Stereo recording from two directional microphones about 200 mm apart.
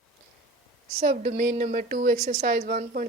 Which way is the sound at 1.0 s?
45° right (ahead or behind).